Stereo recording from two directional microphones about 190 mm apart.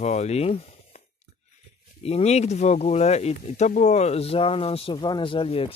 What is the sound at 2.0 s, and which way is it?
Speech, 35° left (ahead or behind).